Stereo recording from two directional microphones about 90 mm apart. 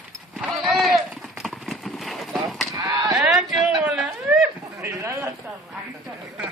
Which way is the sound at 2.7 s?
50° right (ahead or behind).